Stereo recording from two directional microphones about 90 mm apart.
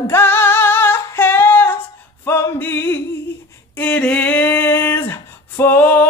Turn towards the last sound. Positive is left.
turn(degrees=20)  # may be behind; listen again after turning